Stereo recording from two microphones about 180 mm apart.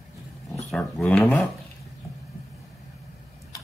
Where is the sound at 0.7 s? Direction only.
5° left (ahead or behind).